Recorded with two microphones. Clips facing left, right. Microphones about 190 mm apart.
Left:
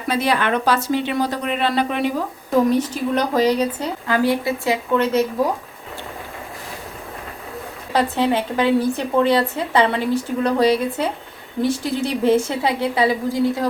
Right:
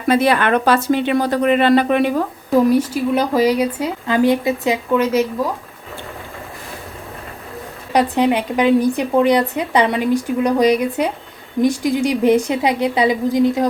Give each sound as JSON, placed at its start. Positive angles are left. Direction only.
{"t": 0.1, "sound": "speech", "side_deg": -55}
{"t": 2.6, "sound": "speech", "side_deg": -10}
{"t": 7.9, "sound": "speech", "side_deg": -15}